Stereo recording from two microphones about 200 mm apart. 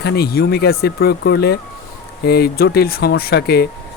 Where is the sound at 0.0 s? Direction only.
50° left (ahead or behind).